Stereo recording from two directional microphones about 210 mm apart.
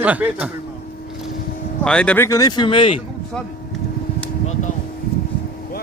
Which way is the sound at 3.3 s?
5° left (ahead or behind).